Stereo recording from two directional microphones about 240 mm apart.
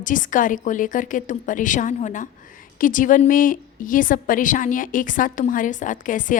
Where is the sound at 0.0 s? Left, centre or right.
Left.